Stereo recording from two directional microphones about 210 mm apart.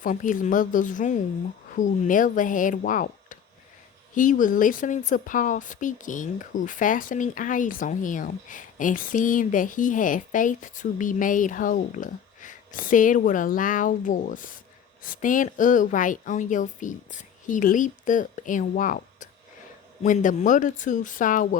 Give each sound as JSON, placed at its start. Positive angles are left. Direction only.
{"t": 0.0, "sound": "speech", "side_deg": 40}